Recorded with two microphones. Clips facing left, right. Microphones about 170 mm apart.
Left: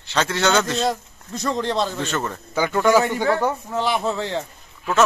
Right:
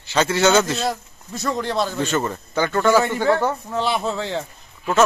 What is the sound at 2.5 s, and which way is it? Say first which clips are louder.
A man's voice: even; 10° left (ahead or behind).